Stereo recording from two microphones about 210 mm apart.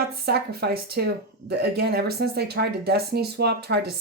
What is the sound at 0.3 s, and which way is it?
Speech, 50° right (ahead or behind).